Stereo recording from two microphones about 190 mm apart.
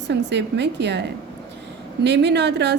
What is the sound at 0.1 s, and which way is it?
Speech, 65° right (ahead or behind).